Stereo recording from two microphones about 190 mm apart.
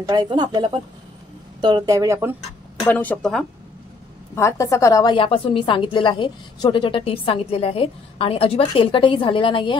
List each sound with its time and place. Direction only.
0.1 s speech: 20° right (ahead or behind)
2.8 s speech: 10° left (ahead or behind)
4.4 s a woman's voice: 15° left (ahead or behind)